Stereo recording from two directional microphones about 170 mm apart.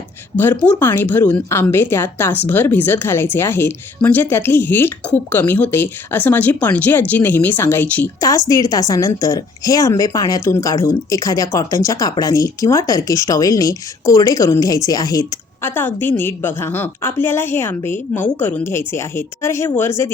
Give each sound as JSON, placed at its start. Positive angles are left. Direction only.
{"t": 0.6, "sound": "a woman's voice", "side_deg": 10}